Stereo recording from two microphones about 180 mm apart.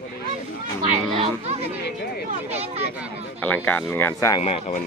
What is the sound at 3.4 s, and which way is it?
Speech, 10° left (ahead or behind).